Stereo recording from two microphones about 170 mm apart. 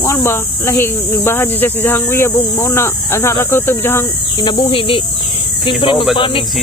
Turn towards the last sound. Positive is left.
turn(degrees=30)  # may be behind; listen again after turning